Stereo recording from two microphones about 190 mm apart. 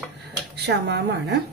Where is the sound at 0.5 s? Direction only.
60° right (ahead or behind).